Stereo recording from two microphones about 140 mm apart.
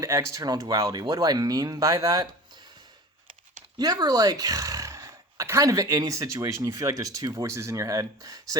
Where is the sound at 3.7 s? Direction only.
30° right (ahead or behind).